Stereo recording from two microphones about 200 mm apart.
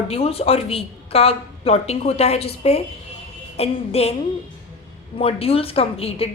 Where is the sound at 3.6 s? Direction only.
30° left (ahead or behind).